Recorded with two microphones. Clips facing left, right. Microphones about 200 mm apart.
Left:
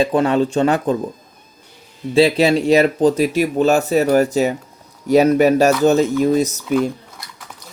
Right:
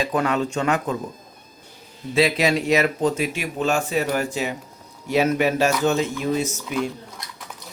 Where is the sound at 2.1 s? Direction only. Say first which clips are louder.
Left 6 dB; 30° left (ahead or behind).